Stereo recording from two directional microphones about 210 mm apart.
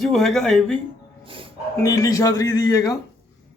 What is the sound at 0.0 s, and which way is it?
Speech, centre (ahead or behind).